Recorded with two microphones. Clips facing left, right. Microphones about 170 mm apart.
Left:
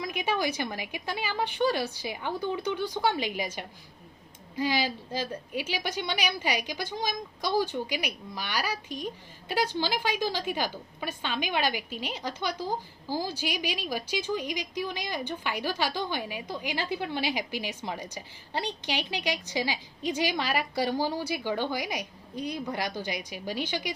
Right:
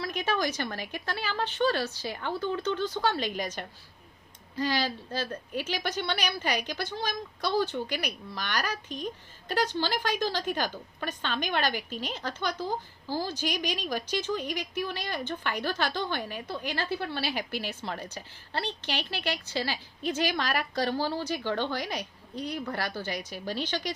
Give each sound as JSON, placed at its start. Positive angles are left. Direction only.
{"t": 0.0, "sound": "a woman's voice", "side_deg": 10}